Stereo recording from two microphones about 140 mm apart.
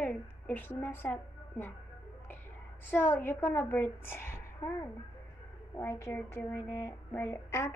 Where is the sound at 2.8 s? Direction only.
15° left (ahead or behind).